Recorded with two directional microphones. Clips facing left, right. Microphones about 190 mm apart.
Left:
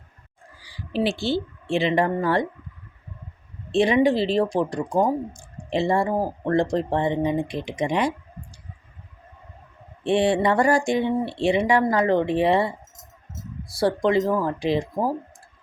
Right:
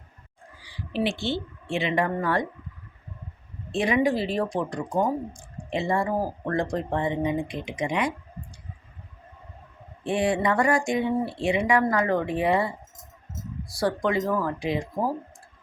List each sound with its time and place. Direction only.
0.6 s speech: 35° left (ahead or behind)
3.7 s speech: 30° left (ahead or behind)
10.0 s speech: 30° left (ahead or behind)
13.7 s speech: 30° left (ahead or behind)